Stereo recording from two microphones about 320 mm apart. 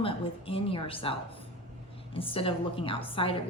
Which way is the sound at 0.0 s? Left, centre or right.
Centre.